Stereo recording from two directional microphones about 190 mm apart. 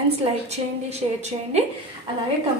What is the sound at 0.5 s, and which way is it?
Speech, 35° right (ahead or behind).